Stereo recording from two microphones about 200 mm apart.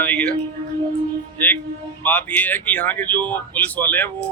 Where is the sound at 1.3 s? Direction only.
10° left (ahead or behind).